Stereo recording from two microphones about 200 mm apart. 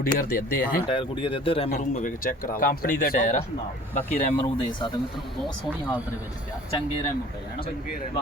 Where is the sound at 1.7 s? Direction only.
45° left (ahead or behind).